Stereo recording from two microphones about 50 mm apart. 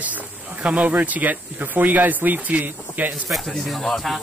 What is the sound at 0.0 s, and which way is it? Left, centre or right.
Speech, right.